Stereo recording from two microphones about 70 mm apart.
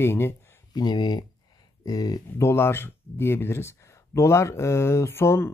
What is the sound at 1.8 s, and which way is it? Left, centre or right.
Speech, left.